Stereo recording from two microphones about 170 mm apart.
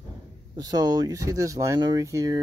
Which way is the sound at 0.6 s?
20° right (ahead or behind).